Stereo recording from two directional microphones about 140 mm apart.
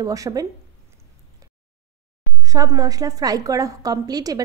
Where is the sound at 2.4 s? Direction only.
25° right (ahead or behind).